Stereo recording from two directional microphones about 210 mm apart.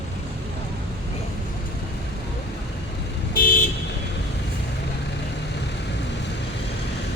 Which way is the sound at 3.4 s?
40° left (ahead or behind).